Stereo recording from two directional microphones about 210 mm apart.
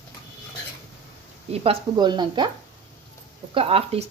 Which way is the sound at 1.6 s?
25° right (ahead or behind).